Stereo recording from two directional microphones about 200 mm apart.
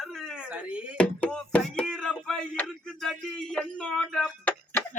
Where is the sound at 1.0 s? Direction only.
5° left (ahead or behind).